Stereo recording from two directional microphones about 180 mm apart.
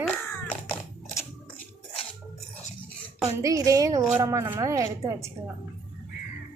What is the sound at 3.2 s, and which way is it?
A woman's voice, 20° right (ahead or behind).